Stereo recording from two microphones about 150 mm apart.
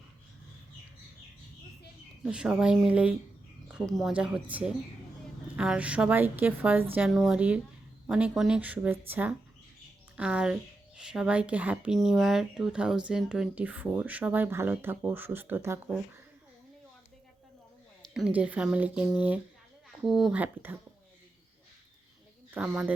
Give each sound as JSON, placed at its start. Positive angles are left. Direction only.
{"t": 2.2, "sound": "speech", "side_deg": -5}
{"t": 18.0, "sound": "speech", "side_deg": -5}
{"t": 22.5, "sound": "speech", "side_deg": -10}